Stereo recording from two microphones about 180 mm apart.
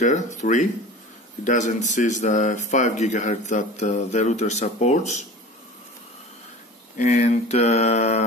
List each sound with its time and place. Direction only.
0.0 s speech: 40° left (ahead or behind)
7.0 s speech: 40° left (ahead or behind)